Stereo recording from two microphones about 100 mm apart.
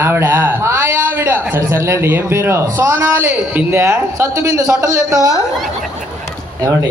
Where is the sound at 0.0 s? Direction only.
25° right (ahead or behind).